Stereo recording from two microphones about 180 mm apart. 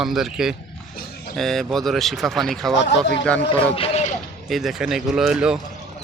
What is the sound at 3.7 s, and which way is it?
Speech, 30° left (ahead or behind).